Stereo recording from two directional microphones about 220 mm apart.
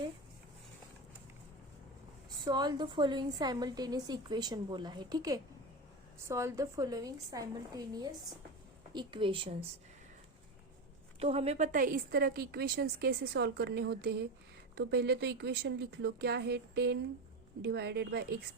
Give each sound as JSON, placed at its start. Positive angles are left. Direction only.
{"t": 2.4, "sound": "a woman's voice", "side_deg": -20}
{"t": 11.2, "sound": "a woman's voice", "side_deg": -30}